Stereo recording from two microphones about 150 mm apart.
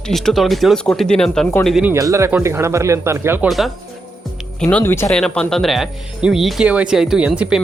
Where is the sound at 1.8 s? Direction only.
20° right (ahead or behind).